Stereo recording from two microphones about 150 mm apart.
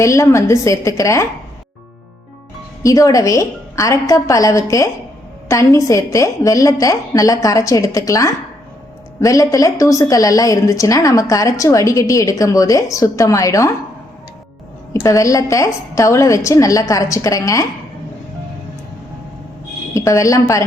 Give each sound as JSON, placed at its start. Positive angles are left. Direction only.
{"t": 0.0, "sound": "a woman's voice", "side_deg": 20}
{"t": 2.8, "sound": "a woman's voice", "side_deg": 20}
{"t": 15.0, "sound": "a woman's voice", "side_deg": 20}
{"t": 19.9, "sound": "a woman's voice", "side_deg": 20}